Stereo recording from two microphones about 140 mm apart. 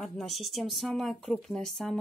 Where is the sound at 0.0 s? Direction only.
Centre (ahead or behind).